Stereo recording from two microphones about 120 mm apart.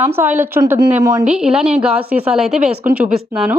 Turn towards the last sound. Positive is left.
turn(degrees=-5)  # may be behind; listen again after turning